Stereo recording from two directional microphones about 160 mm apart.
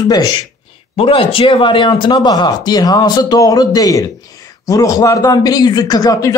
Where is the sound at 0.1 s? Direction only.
25° left (ahead or behind).